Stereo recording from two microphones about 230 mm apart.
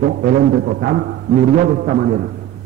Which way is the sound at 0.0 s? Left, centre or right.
Right.